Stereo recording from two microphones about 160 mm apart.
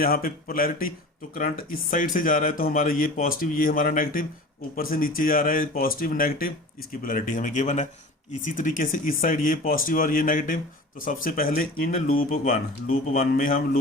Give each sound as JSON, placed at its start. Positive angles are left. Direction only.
{"t": 0.0, "sound": "speech", "side_deg": 65}